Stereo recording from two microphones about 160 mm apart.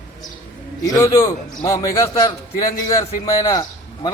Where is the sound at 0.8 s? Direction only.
20° left (ahead or behind).